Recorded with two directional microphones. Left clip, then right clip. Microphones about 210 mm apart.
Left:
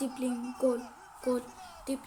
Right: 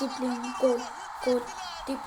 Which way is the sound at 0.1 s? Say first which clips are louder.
Right 5 dB; 45° right (ahead or behind).